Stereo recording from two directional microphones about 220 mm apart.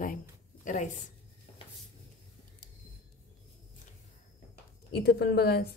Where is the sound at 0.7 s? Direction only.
35° left (ahead or behind).